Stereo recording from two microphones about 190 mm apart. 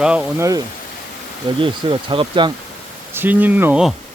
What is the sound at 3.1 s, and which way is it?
Speech, 10° right (ahead or behind).